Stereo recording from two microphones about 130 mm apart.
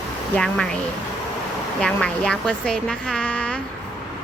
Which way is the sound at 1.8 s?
5° left (ahead or behind).